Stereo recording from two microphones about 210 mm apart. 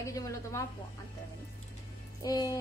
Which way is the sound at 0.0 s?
15° left (ahead or behind).